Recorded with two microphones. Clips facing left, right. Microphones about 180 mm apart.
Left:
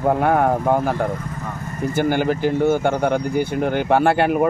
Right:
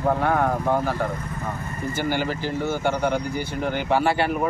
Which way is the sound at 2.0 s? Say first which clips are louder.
Left 7 dB; 50° left (ahead or behind).